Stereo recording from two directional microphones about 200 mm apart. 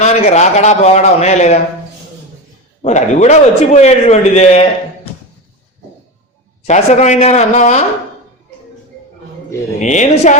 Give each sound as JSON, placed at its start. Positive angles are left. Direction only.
{"t": 0.0, "sound": "a man's voice", "side_deg": 35}
{"t": 2.8, "sound": "a man's voice", "side_deg": 35}
{"t": 6.7, "sound": "a man's voice", "side_deg": 35}
{"t": 9.8, "sound": "a man's voice", "side_deg": 35}